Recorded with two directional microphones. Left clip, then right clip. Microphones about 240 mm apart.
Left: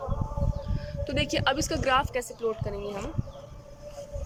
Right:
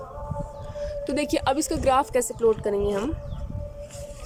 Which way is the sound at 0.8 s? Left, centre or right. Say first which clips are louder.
Right 4 dB; right.